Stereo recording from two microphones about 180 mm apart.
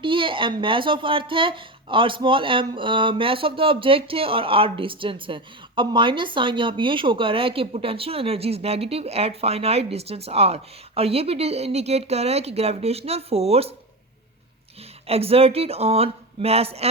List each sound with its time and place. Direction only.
0.0 s speech: 30° right (ahead or behind)
15.0 s speech: 35° right (ahead or behind)